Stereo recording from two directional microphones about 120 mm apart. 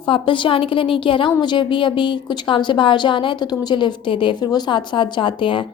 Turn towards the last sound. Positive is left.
turn(degrees=45)  # may be behind; listen again after turning